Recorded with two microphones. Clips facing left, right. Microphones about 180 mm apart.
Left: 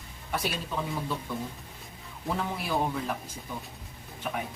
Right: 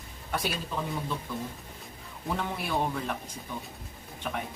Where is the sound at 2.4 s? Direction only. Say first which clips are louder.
Left 1 dB; centre (ahead or behind).